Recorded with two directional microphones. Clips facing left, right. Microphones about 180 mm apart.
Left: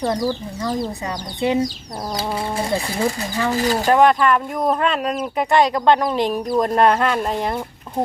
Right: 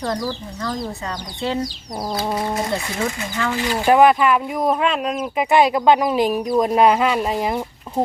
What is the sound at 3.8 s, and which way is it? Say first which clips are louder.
Speech: right 2 dB; 10° right (ahead or behind).